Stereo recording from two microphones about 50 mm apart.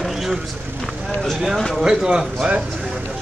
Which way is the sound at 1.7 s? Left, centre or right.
Centre.